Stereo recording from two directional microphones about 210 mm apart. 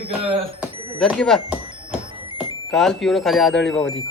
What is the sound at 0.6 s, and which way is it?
Speech, centre (ahead or behind).